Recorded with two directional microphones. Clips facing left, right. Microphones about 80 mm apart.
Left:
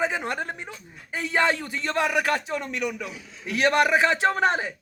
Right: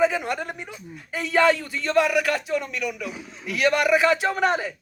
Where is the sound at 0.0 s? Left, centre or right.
Left.